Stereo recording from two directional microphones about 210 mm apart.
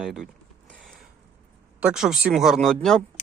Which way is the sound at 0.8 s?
Centre (ahead or behind).